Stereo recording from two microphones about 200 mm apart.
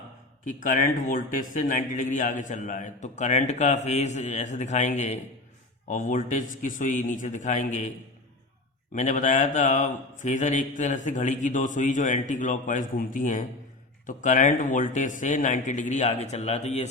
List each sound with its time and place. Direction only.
0.6 s a man's voice: 40° left (ahead or behind)
8.9 s a man's voice: 40° left (ahead or behind)